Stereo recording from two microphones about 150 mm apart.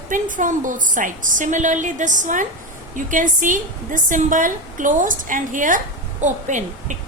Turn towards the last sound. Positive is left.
turn(degrees=-55)  # may be behind; listen again after turning